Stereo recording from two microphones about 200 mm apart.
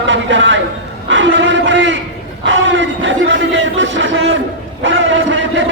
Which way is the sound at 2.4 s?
70° right (ahead or behind).